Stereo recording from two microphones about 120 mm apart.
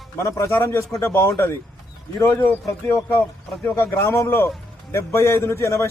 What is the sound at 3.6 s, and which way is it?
A man's voice, 20° left (ahead or behind).